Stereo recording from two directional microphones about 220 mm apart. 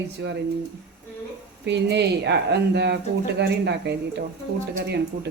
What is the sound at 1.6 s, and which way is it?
Speech, 50° right (ahead or behind).